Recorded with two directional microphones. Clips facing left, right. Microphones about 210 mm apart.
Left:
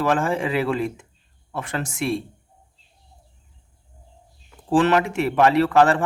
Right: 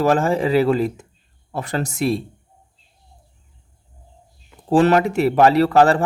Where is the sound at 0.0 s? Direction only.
40° right (ahead or behind).